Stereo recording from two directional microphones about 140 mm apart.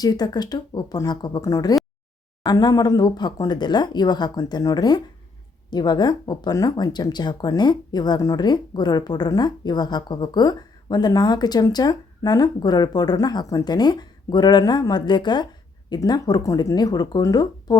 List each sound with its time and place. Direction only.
0.0 s speech: 30° left (ahead or behind)